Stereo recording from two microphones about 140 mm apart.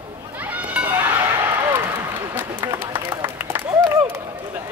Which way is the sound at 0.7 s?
10° right (ahead or behind).